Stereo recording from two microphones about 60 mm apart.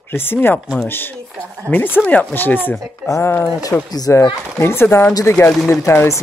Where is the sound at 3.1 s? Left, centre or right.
Left.